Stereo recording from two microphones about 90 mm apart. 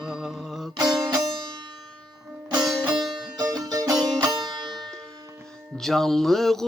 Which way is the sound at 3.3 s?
45° right (ahead or behind).